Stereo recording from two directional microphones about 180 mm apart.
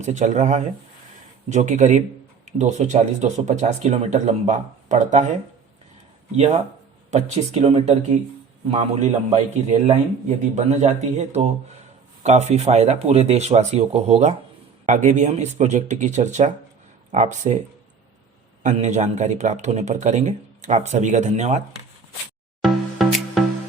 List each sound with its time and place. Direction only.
0.0 s speech: 40° right (ahead or behind)
6.3 s speech: 35° right (ahead or behind)
18.6 s speech: 40° right (ahead or behind)
22.6 s music: centre (ahead or behind)